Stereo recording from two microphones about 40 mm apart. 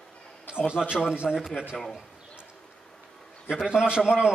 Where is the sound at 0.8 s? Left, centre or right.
Left.